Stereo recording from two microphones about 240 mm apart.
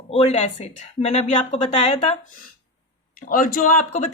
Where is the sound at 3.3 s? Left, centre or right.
Left.